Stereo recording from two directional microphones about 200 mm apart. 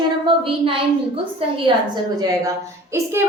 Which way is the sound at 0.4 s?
25° right (ahead or behind).